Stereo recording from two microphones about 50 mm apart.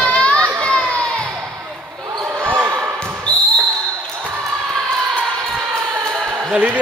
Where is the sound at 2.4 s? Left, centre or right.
Right.